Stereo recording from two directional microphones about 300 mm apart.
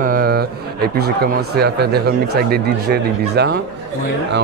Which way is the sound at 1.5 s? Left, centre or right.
Right.